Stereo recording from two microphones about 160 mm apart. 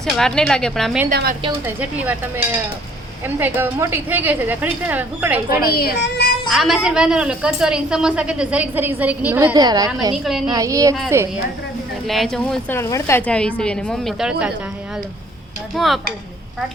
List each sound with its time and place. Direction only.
0.0 s a woman's voice: 5° left (ahead or behind)
1.1 s a woman's voice: 70° right (ahead or behind)
1.6 s a woman's voice: 10° right (ahead or behind)
5.6 s speech: 75° left (ahead or behind)
6.5 s a woman's voice: centre (ahead or behind)
9.6 s a woman's voice: 25° right (ahead or behind)
10.2 s a woman's voice: centre (ahead or behind)
10.5 s a woman's voice: 20° right (ahead or behind)
12.0 s a woman's voice: centre (ahead or behind)
12.7 s a woman's voice: 15° left (ahead or behind); by 14.5 s 5° right (ahead or behind)
15.7 s a woman's voice: centre (ahead or behind)